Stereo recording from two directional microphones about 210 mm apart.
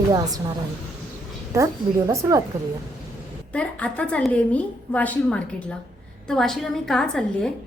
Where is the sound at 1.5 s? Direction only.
15° right (ahead or behind).